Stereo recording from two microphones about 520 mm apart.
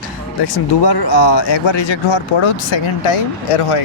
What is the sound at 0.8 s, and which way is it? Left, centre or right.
Speech, left.